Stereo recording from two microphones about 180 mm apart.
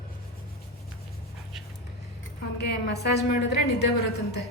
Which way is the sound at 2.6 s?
70° left (ahead or behind).